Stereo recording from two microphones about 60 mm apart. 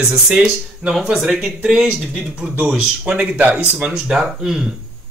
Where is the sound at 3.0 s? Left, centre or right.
Right.